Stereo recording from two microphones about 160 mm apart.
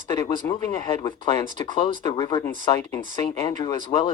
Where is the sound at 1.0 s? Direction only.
30° left (ahead or behind).